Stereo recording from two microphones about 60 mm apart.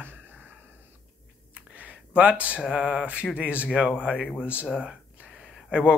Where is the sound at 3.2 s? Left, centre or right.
Centre.